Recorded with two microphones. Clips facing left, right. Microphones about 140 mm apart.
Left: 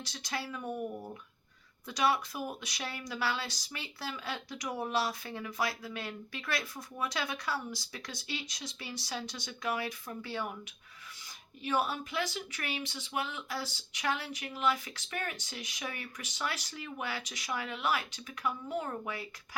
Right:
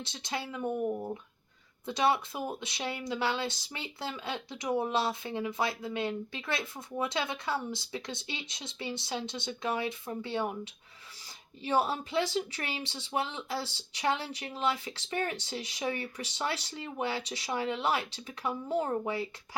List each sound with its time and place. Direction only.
0.0 s speech: 25° right (ahead or behind)